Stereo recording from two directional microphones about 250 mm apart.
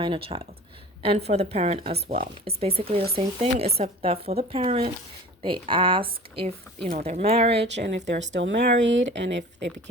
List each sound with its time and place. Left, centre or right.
0.0 s a woman's voice: right
7.5 s speech: right